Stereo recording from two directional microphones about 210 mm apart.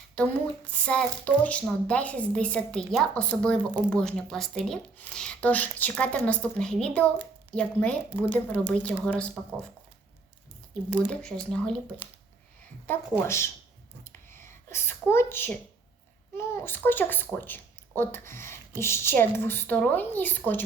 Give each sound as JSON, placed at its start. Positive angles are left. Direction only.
{"t": 0.2, "sound": "a woman's voice", "side_deg": 5}
{"t": 11.1, "sound": "a woman's voice", "side_deg": 5}
{"t": 12.9, "sound": "speech", "side_deg": 10}
{"t": 14.0, "sound": "a sound", "side_deg": 10}
{"t": 16.4, "sound": "speech", "side_deg": 10}